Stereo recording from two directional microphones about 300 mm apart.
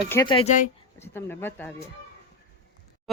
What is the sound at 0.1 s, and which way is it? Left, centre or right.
Speech, centre.